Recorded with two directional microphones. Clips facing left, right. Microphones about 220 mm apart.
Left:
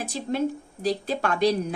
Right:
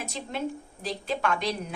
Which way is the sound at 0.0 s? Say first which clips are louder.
Left 6 dB; 35° left (ahead or behind).